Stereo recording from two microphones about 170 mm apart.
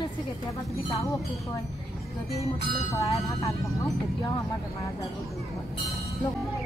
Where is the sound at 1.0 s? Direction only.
20° left (ahead or behind).